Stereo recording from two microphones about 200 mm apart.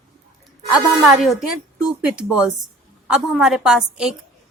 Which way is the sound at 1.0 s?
Centre (ahead or behind).